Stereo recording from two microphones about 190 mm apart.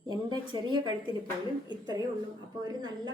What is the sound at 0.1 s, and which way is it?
Speech, 20° right (ahead or behind).